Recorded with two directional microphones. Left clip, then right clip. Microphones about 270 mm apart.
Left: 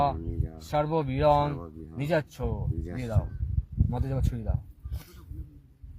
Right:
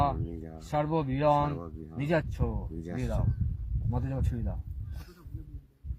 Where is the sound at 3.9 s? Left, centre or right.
Left.